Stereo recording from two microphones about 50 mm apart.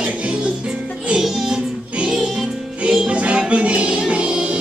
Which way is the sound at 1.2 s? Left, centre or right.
Centre.